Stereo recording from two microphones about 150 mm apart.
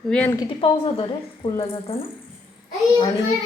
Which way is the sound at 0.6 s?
35° left (ahead or behind).